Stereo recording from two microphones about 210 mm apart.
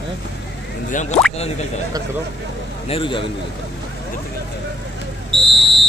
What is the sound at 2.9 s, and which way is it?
Speech, 25° left (ahead or behind).